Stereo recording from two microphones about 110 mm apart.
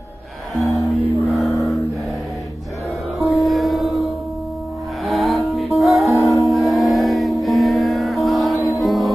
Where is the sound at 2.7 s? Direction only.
30° left (ahead or behind).